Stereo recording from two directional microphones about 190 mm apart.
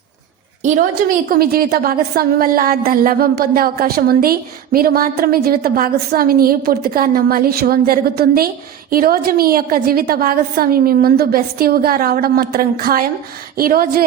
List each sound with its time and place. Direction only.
0.6 s a woman's voice: 40° right (ahead or behind)
1.3 s a woman's voice: 50° right (ahead or behind)